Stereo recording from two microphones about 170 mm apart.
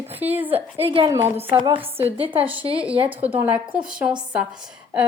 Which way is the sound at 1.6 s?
30° right (ahead or behind).